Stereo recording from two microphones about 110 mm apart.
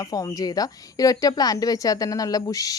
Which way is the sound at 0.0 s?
35° left (ahead or behind).